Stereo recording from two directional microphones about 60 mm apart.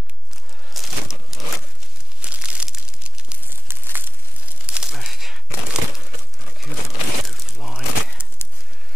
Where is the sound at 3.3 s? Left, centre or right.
Right.